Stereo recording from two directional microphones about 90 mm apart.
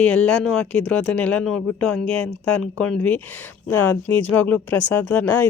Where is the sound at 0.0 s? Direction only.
10° left (ahead or behind).